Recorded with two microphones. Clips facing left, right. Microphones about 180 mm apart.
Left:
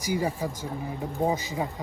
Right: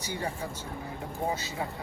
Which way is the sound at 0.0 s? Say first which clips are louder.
Left 7 dB; 10° left (ahead or behind).